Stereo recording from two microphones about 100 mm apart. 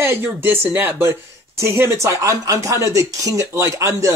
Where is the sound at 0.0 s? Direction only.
20° right (ahead or behind).